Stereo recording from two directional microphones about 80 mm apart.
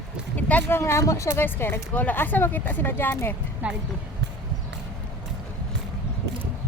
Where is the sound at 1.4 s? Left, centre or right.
Left.